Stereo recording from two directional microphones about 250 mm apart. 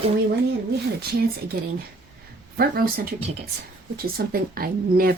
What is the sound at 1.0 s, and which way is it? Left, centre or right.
Speech, right.